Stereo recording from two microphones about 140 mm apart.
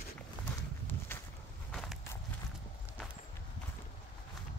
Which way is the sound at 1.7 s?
Centre (ahead or behind).